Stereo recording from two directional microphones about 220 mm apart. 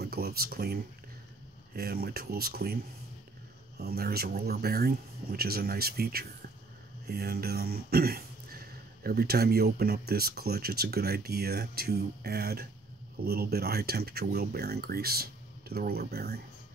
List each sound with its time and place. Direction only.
0.0 s speech: 45° right (ahead or behind)
1.8 s speech: 45° right (ahead or behind)
3.8 s speech: 45° right (ahead or behind)